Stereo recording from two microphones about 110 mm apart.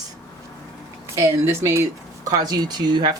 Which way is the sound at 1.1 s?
25° right (ahead or behind).